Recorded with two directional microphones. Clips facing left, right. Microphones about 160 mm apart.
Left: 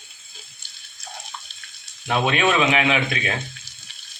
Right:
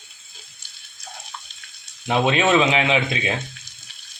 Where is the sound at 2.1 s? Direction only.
25° right (ahead or behind).